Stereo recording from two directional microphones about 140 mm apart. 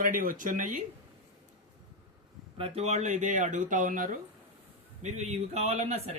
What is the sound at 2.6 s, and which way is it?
Speech, 45° right (ahead or behind).